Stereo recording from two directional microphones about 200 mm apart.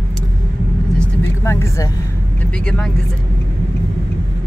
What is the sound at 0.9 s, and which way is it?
Vehicle, 15° left (ahead or behind).